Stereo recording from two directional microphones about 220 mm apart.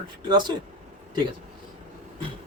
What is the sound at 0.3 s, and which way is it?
Speech, 20° right (ahead or behind).